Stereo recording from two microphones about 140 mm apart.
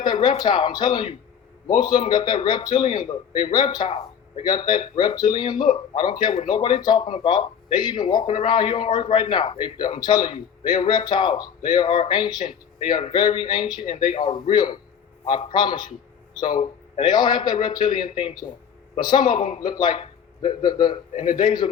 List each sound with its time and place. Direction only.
0.0 s a man's voice: 30° left (ahead or behind)
21.1 s a man's voice: 65° left (ahead or behind)
21.4 s a man's voice: 30° left (ahead or behind)